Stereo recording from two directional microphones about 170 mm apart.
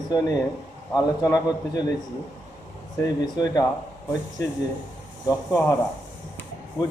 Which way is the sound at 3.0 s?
25° left (ahead or behind).